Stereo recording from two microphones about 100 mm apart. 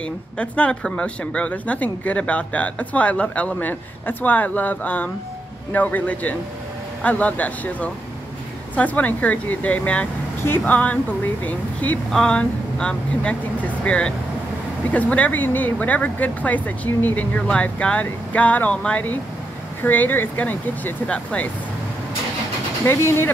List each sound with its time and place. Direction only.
0.0 s speech: 10° left (ahead or behind)
22.8 s speech: 25° left (ahead or behind)